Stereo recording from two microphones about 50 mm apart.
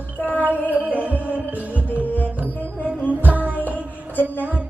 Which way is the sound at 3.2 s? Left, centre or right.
Right.